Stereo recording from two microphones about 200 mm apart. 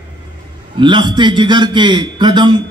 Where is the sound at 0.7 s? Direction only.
25° right (ahead or behind).